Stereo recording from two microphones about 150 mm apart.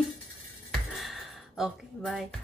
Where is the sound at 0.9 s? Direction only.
Centre (ahead or behind).